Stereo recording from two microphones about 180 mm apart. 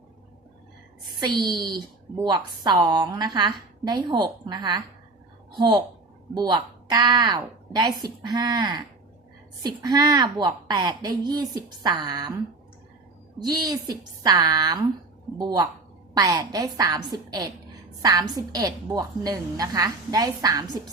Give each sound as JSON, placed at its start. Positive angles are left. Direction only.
{"t": 1.2, "sound": "a woman's voice", "side_deg": -25}
{"t": 13.4, "sound": "a woman's voice", "side_deg": -20}